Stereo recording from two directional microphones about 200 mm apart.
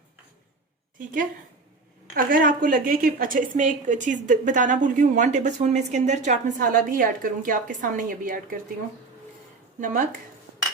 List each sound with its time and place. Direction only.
0.9 s a woman's voice: 40° right (ahead or behind)
9.8 s a woman's voice: 40° right (ahead or behind)